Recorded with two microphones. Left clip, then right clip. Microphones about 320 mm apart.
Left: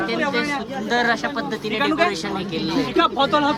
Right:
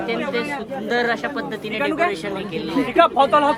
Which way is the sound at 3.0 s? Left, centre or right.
Centre.